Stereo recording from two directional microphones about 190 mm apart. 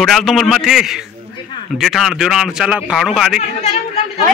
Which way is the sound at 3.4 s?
35° left (ahead or behind).